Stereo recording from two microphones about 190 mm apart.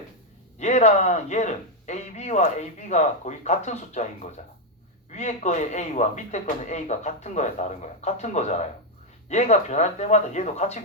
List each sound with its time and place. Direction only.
0.6 s speech: 35° left (ahead or behind)